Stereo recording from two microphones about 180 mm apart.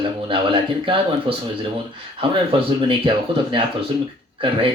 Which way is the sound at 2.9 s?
30° right (ahead or behind).